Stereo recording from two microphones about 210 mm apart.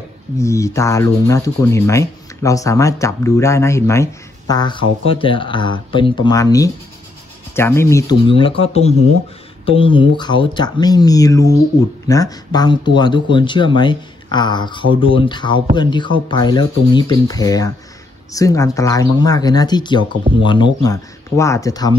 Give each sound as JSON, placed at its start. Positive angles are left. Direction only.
{"t": 0.4, "sound": "speech", "side_deg": 15}
{"t": 8.3, "sound": "speech", "side_deg": 25}